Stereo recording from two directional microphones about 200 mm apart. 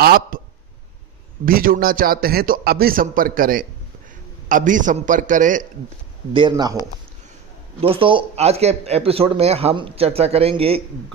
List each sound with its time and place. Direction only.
0.0 s a man's voice: 50° right (ahead or behind)
1.4 s a man's voice: 45° right (ahead or behind)
6.3 s a man's voice: 20° right (ahead or behind)
7.8 s a man's voice: 25° right (ahead or behind)